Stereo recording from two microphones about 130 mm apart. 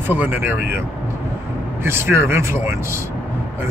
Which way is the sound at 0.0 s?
15° right (ahead or behind).